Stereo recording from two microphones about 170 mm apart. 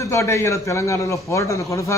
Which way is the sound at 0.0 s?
15° left (ahead or behind).